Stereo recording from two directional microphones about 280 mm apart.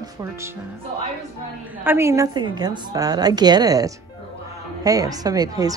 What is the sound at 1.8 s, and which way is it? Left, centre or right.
A woman's voice, centre.